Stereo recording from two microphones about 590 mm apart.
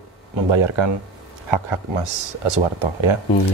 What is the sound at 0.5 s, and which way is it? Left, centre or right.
A man's voice, right.